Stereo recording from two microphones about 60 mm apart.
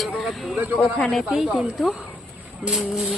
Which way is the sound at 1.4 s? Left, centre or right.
Centre.